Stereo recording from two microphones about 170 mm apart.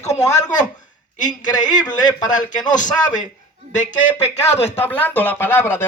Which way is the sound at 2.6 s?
50° left (ahead or behind).